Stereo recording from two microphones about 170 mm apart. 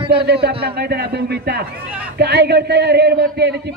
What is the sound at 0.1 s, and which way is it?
A man's voice, 70° right (ahead or behind).